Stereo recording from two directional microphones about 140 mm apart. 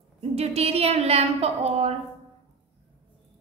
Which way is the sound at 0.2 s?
45° right (ahead or behind).